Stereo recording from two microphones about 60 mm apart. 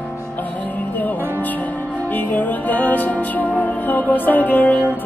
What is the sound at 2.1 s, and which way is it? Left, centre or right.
Music, left.